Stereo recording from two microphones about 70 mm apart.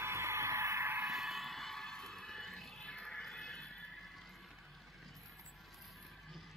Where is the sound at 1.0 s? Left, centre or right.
Centre.